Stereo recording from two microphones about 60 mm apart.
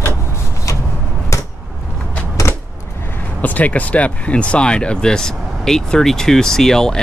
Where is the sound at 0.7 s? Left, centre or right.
Left.